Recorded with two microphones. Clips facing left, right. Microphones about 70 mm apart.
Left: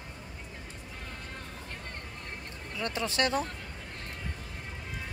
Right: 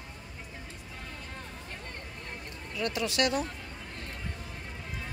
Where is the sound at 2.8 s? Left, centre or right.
Left.